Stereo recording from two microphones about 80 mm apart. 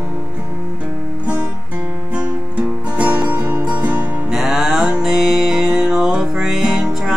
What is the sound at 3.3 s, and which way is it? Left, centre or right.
Music, right.